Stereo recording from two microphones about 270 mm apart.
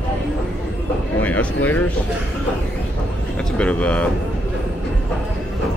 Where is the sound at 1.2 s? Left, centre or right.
Centre.